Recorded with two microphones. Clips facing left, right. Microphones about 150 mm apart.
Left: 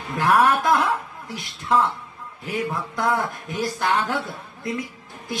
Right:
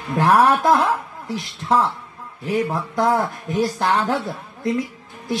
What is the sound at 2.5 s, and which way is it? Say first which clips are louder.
Speech: right 5 dB; 35° right (ahead or behind).